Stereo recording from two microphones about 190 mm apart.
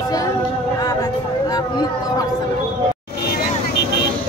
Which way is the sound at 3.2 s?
60° left (ahead or behind).